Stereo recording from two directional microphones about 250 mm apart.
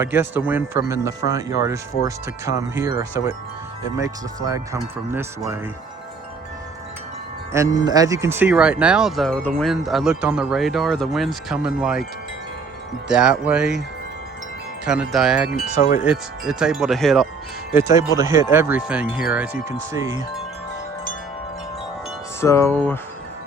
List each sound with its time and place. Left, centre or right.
0.0 s speech: centre
7.5 s speech: centre
13.1 s speech: centre
14.8 s speech: centre
15.5 s wind chime: left
16.0 s speech: centre
17.7 s speech: centre
22.4 s chime: centre